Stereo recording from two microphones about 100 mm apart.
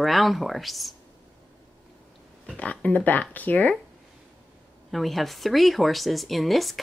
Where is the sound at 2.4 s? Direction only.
15° left (ahead or behind).